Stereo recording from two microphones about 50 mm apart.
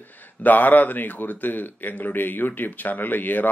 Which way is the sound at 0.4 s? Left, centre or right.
Left.